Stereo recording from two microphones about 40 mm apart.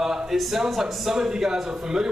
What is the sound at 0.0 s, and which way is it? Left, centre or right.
Speech, centre.